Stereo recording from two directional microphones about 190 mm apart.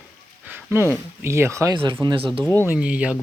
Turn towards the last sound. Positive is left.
turn(degrees=-5)  # may be behind; listen again after turning